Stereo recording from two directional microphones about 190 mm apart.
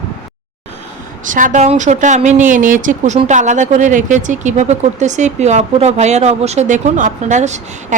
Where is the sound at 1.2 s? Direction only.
45° right (ahead or behind).